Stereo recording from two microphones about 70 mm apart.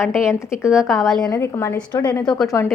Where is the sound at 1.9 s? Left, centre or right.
Left.